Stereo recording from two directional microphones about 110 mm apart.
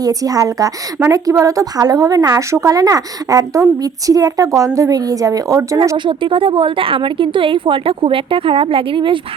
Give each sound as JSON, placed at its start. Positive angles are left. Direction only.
{"t": 0.0, "sound": "a woman's voice", "side_deg": -35}
{"t": 6.1, "sound": "a woman's voice", "side_deg": -50}